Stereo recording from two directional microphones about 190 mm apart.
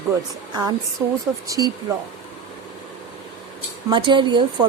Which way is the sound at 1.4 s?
20° right (ahead or behind).